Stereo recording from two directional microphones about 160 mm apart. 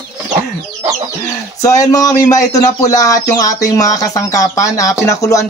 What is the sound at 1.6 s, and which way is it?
Speech, 20° left (ahead or behind).